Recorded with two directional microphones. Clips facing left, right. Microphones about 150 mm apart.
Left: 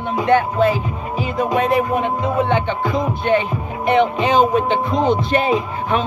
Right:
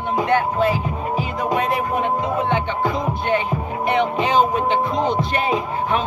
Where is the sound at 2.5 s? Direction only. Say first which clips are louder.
Left 3 dB; 20° left (ahead or behind).